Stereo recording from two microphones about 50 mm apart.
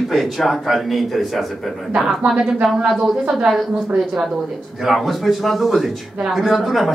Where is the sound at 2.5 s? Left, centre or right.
Centre.